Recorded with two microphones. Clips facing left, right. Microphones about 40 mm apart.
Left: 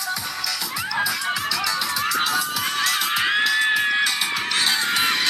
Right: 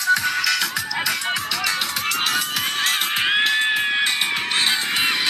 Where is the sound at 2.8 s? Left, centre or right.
Right.